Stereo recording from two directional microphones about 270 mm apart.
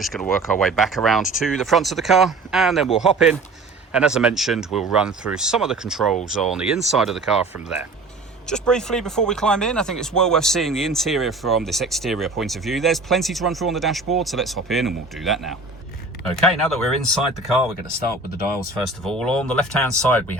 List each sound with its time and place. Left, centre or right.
0.0 s speech: centre
8.4 s speech: centre
19.0 s speech: centre